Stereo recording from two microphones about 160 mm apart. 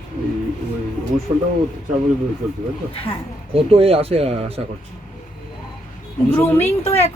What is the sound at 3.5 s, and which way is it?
Speech, 35° right (ahead or behind).